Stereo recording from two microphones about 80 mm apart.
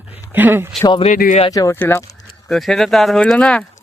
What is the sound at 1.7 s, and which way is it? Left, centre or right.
Speech, left.